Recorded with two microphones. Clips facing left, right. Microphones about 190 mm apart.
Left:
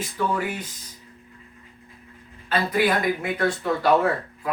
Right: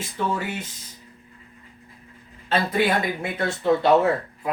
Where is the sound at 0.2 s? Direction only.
25° right (ahead or behind).